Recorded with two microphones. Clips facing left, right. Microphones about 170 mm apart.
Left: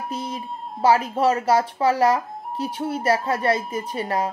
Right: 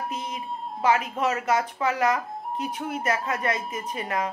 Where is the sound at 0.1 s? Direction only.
35° left (ahead or behind).